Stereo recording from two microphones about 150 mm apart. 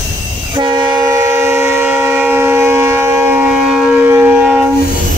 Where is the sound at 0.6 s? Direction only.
30° right (ahead or behind); by 3.9 s 5° right (ahead or behind).